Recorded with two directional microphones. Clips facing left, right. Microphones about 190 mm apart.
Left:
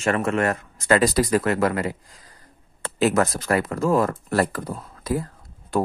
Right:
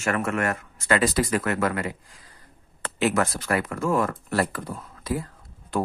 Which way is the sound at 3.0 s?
40° left (ahead or behind).